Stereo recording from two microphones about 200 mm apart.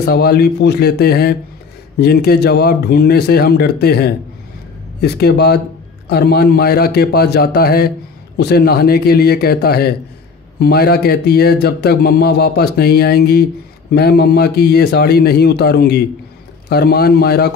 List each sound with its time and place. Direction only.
0.0 s speech: 55° left (ahead or behind)